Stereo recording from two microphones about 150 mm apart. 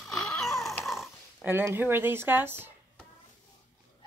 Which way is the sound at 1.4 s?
15° right (ahead or behind).